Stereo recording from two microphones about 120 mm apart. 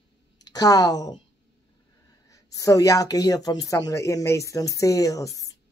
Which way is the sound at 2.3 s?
30° left (ahead or behind).